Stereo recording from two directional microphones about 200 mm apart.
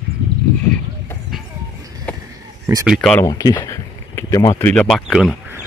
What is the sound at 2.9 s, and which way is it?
Speech, centre (ahead or behind).